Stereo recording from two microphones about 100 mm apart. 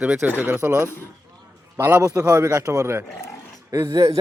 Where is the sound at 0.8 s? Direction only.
25° left (ahead or behind).